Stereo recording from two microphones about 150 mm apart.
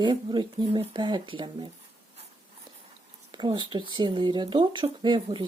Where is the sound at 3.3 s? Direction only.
30° right (ahead or behind).